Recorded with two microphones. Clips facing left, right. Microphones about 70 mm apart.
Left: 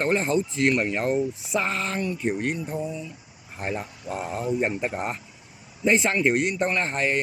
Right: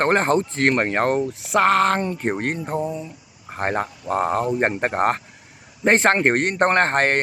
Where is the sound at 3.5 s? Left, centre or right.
Right.